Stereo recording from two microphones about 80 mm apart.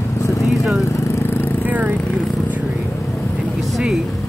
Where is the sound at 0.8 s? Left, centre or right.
Left.